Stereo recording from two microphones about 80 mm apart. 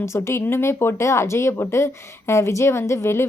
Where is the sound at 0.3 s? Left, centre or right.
Left.